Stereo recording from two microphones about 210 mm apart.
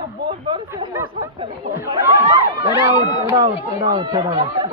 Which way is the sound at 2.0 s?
15° right (ahead or behind).